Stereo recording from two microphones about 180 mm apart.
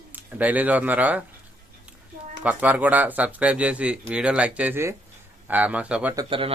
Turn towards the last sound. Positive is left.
turn(degrees=-30)  # may be behind; listen again after turning